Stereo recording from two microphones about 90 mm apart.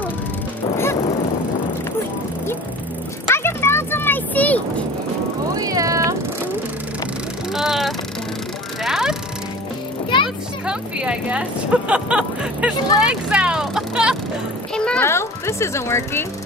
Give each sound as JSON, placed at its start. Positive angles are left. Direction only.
{"t": 3.3, "sound": "music", "side_deg": 30}
{"t": 5.5, "sound": "vehicle", "side_deg": -40}
{"t": 7.5, "sound": "a sound", "side_deg": -5}
{"t": 8.8, "sound": "music", "side_deg": -5}
{"t": 10.2, "sound": "speech", "side_deg": -10}
{"t": 15.0, "sound": "speech", "side_deg": 30}